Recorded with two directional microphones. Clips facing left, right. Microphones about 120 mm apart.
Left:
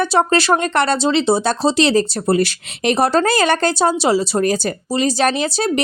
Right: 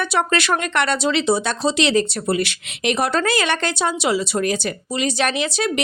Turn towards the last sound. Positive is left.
turn(degrees=35)  # may be behind; listen again after turning